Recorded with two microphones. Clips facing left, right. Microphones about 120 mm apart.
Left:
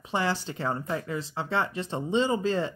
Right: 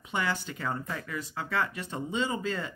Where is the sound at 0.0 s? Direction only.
30° left (ahead or behind).